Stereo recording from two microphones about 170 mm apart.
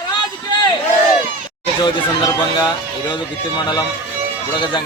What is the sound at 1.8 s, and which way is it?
Speech, 25° left (ahead or behind).